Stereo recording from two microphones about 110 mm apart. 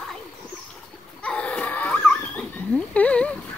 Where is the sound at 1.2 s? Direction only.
10° left (ahead or behind).